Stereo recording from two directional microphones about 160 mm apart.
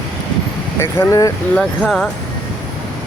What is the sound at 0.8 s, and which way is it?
Speech, 20° left (ahead or behind).